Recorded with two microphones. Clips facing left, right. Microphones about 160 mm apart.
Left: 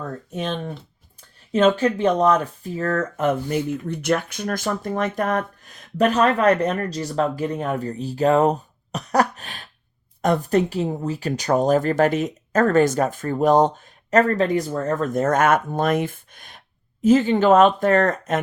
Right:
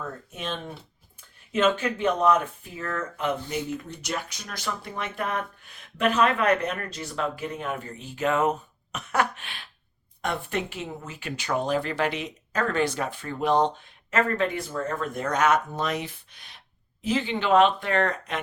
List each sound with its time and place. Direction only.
1.5 s speech: 35° left (ahead or behind)